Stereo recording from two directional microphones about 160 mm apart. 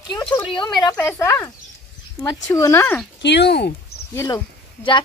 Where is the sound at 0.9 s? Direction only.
15° left (ahead or behind).